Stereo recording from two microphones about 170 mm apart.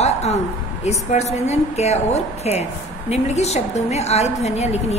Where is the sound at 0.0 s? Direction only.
40° left (ahead or behind).